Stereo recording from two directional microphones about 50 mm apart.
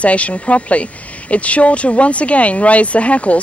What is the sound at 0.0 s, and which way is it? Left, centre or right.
Speech, left.